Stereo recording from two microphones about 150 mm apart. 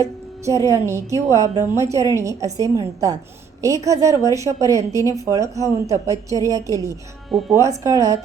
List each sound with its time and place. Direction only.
0.0 s a woman's voice: 20° right (ahead or behind)
7.3 s speech: centre (ahead or behind)
7.5 s a woman's voice: 20° right (ahead or behind)